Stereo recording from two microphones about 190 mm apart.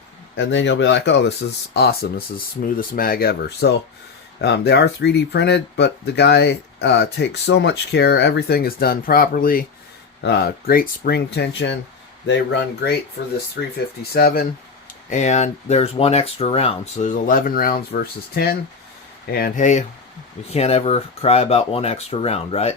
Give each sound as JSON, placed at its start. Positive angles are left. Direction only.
{"t": 0.3, "sound": "speech", "side_deg": 70}
{"t": 10.2, "sound": "speech", "side_deg": 60}
{"t": 15.1, "sound": "speech", "side_deg": 40}